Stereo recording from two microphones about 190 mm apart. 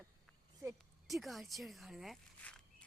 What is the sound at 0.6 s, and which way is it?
Speech, 10° right (ahead or behind).